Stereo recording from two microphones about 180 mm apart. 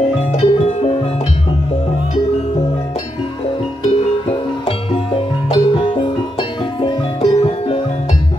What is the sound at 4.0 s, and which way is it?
Music, 30° left (ahead or behind).